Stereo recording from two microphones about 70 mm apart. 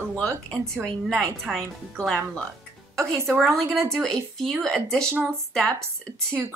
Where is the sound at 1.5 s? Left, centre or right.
Centre.